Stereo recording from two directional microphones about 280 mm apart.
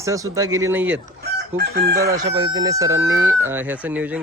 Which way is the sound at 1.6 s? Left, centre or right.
Right.